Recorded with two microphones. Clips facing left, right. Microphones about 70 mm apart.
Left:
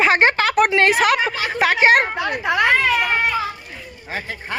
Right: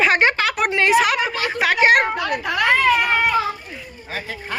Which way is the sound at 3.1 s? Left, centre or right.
Centre.